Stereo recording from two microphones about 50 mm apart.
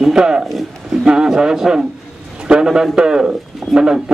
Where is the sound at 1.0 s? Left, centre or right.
Centre.